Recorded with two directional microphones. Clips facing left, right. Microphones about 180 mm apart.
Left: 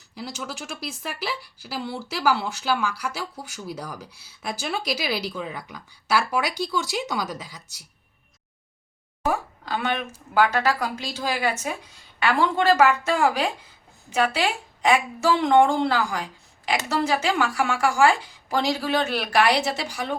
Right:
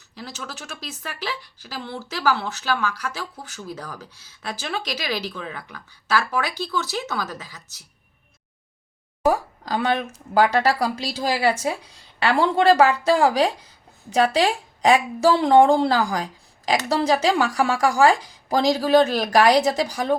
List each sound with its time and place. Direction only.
0.1 s speech: 10° left (ahead or behind)
9.2 s speech: 35° right (ahead or behind)